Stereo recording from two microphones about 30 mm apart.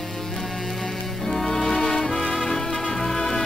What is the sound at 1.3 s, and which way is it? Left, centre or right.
Music, centre.